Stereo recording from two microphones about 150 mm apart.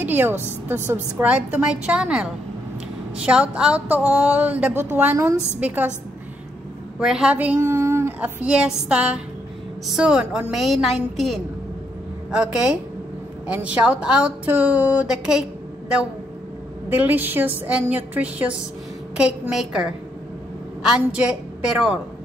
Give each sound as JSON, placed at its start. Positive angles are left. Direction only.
{"t": 0.0, "sound": "a woman's voice", "side_deg": -15}
{"t": 7.0, "sound": "a woman's voice", "side_deg": -5}
{"t": 16.9, "sound": "a woman's voice", "side_deg": -10}